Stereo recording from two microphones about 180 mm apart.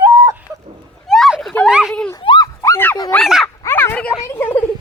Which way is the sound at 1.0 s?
Centre (ahead or behind).